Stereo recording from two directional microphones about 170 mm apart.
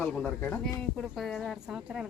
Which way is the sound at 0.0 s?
5° left (ahead or behind).